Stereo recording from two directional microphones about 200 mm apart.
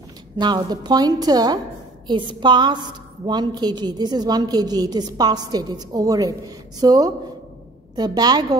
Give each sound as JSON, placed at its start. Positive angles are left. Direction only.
{"t": 0.4, "sound": "a woman's voice", "side_deg": -20}